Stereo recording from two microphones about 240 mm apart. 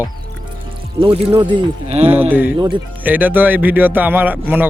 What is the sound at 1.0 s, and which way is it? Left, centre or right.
Speech, right.